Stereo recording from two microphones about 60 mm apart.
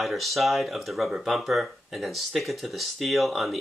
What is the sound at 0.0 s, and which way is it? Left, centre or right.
Speech, centre.